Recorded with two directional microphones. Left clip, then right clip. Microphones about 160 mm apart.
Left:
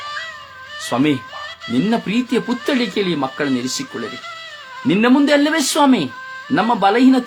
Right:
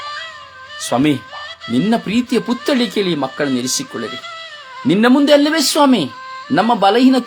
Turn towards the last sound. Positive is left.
turn(degrees=-30)  # may be behind; listen again after turning